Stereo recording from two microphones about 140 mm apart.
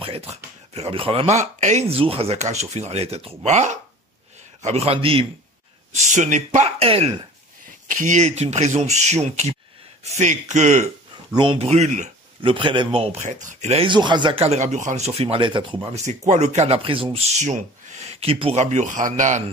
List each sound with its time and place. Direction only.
0.0 s speech: 45° right (ahead or behind)
5.9 s speech: 60° right (ahead or behind); by 7.2 s 40° right (ahead or behind)
7.9 s speech: 65° right (ahead or behind)
12.4 s speech: 40° right (ahead or behind)
13.8 s speech: 35° right (ahead or behind)
15.9 s speech: 55° right (ahead or behind)